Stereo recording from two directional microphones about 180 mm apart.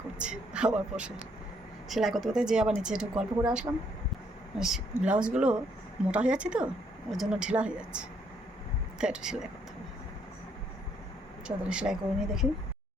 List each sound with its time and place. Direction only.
0.2 s speech: 5° right (ahead or behind)
11.4 s speech: 5° right (ahead or behind)